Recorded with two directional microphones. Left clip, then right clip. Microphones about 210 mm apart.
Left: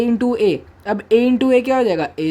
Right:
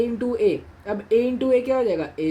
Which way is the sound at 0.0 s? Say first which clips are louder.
Left 4 dB; 40° left (ahead or behind).